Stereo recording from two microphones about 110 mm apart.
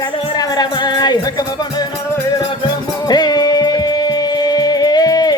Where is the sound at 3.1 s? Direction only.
40° left (ahead or behind).